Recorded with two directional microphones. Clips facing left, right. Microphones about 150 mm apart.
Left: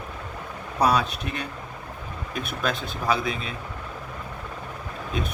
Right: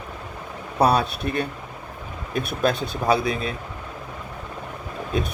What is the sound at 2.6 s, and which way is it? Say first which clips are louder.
Speech: right 6 dB; 40° right (ahead or behind).